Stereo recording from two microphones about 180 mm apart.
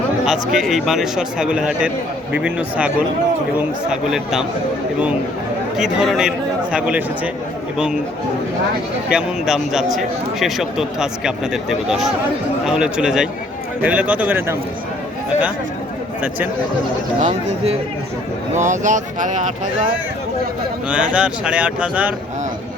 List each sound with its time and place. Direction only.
0.3 s speech: centre (ahead or behind)
5.7 s speech: centre (ahead or behind)
9.1 s speech: centre (ahead or behind)
17.2 s speech: 40° right (ahead or behind)
20.9 s speech: 5° right (ahead or behind)